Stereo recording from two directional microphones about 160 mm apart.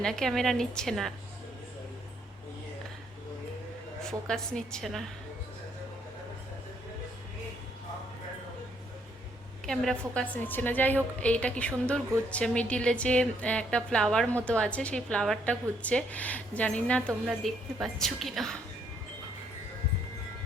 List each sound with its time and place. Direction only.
0.0 s a woman's voice: 5° left (ahead or behind)
4.3 s a woman's voice: 5° left (ahead or behind)
9.6 s a woman's voice: 5° left (ahead or behind)